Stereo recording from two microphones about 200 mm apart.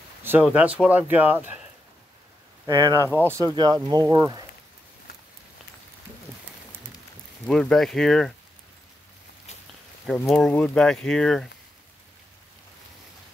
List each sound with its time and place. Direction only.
0.2 s speech: 10° right (ahead or behind)
2.6 s speech: 15° right (ahead or behind)
7.4 s speech: 5° left (ahead or behind)
10.1 s speech: centre (ahead or behind)